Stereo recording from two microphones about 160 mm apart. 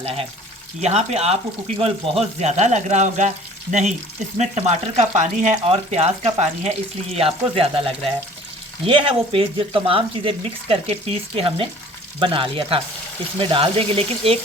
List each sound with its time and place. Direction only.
0.0 s speech: 35° right (ahead or behind)